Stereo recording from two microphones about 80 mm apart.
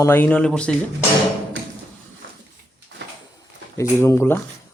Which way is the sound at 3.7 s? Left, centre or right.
Left.